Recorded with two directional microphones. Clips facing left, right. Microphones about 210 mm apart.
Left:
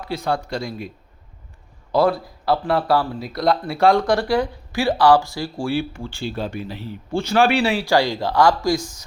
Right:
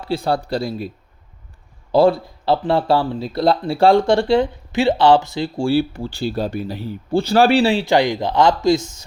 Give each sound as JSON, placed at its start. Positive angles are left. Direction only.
{"t": 0.0, "sound": "speech", "side_deg": -30}